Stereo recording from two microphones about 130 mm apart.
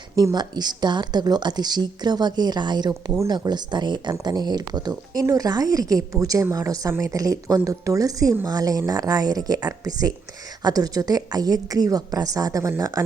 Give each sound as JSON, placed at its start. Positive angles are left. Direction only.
{"t": 0.2, "sound": "a woman's voice", "side_deg": -30}